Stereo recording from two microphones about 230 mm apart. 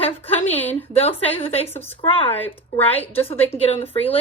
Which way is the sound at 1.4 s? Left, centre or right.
Left.